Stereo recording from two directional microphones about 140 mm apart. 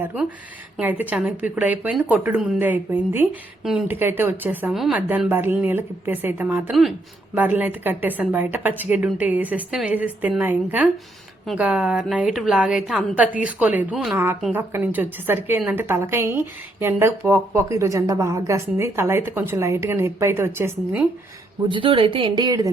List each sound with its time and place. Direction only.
0.8 s a woman's voice: 10° right (ahead or behind)
3.6 s speech: 5° right (ahead or behind)
3.8 s a woman's voice: 15° right (ahead or behind)
4.7 s a woman's voice: centre (ahead or behind)
4.9 s a woman's voice: 10° right (ahead or behind)
21.7 s a woman's voice: 40° right (ahead or behind)